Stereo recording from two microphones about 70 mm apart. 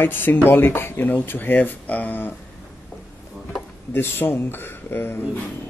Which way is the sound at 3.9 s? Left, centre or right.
Left.